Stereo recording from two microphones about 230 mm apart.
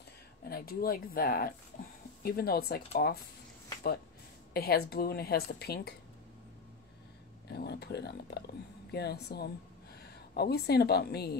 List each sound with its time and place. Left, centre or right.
0.5 s speech: left
4.6 s a woman's voice: left
7.4 s a woman's voice: left